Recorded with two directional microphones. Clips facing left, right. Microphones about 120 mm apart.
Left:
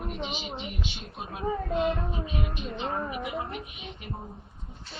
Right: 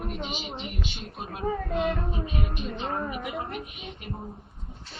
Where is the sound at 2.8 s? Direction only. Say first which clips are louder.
Left 1 dB; centre (ahead or behind).